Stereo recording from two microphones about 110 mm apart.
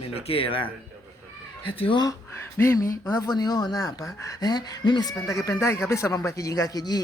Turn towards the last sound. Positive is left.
turn(degrees=35)  # may be behind; listen again after turning